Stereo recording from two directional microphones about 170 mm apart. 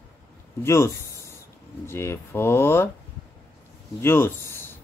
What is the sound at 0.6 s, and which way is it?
Speech, 15° left (ahead or behind).